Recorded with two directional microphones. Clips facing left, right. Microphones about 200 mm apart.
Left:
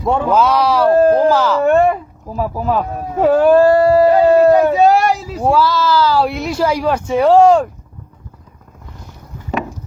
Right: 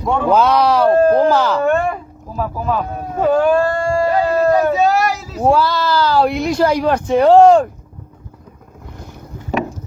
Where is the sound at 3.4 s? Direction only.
35° left (ahead or behind).